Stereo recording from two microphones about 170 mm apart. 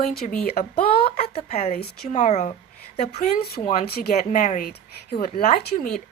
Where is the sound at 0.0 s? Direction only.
55° left (ahead or behind).